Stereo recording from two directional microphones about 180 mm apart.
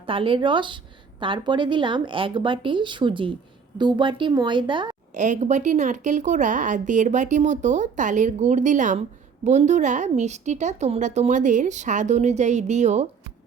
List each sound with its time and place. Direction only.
0.0 s speech: 30° right (ahead or behind)
5.1 s a woman's voice: 40° right (ahead or behind)